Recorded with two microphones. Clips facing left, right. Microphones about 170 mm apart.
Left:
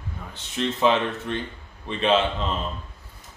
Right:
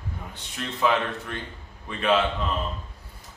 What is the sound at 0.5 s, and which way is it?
A man's voice, 25° left (ahead or behind).